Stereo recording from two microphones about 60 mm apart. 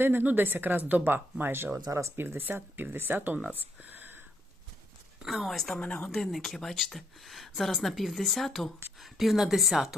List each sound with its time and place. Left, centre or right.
0.0 s speech: right
1.7 s speech: right
2.1 s speech: right
5.2 s speech: centre
5.8 s speech: left
6.1 s speech: centre